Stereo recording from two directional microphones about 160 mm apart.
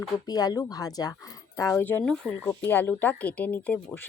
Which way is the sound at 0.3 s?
25° left (ahead or behind).